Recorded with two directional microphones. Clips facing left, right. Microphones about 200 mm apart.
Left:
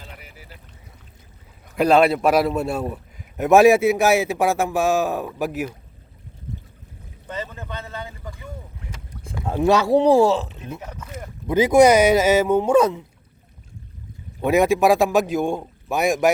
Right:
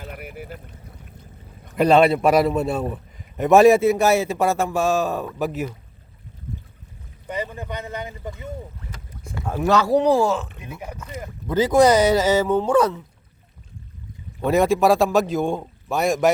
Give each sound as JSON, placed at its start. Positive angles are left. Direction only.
{"t": 0.0, "sound": "a sound", "side_deg": -55}
{"t": 1.7, "sound": "a man's voice", "side_deg": 5}
{"t": 7.3, "sound": "speech", "side_deg": -15}
{"t": 9.3, "sound": "speech", "side_deg": 15}
{"t": 10.8, "sound": "speech", "side_deg": -10}
{"t": 11.0, "sound": "a man's voice", "side_deg": 5}
{"t": 12.7, "sound": "speech", "side_deg": 20}
{"t": 14.4, "sound": "a man's voice", "side_deg": 15}